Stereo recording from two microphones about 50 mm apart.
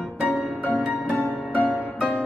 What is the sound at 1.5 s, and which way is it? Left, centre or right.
Music, left.